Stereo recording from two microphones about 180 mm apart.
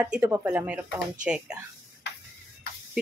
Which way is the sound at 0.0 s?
10° right (ahead or behind).